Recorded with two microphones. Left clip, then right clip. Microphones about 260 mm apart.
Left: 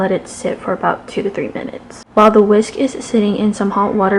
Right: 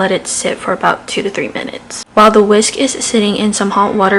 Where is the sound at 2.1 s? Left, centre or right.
Left.